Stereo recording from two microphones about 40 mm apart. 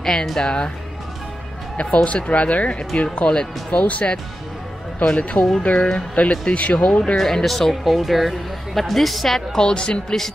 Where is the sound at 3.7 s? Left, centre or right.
Left.